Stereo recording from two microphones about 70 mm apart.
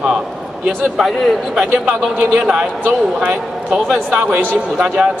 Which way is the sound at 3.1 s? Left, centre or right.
Centre.